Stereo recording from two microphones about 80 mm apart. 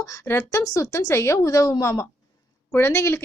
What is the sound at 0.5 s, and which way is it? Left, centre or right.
Speech, left.